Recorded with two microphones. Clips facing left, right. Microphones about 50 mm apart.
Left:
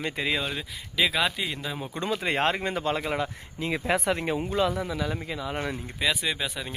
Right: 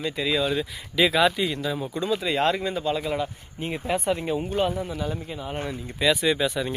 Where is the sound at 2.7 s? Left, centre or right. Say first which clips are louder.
Right 1 dB; left.